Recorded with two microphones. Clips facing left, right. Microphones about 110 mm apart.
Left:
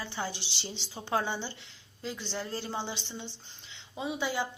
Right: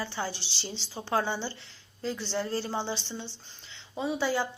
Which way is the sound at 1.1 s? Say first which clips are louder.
Right 2 dB; 20° left (ahead or behind).